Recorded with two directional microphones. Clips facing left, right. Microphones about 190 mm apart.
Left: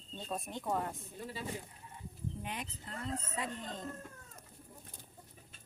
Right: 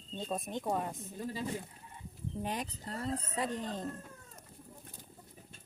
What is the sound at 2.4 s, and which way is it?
Speech, 40° right (ahead or behind).